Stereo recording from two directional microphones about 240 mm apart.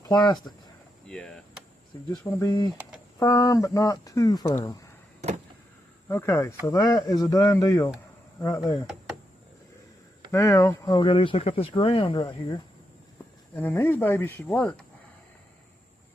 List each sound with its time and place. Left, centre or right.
0.0 s speech: centre
1.0 s a sound: centre
2.4 s speech: centre
6.1 s speech: centre
10.3 s speech: centre
13.5 s speech: centre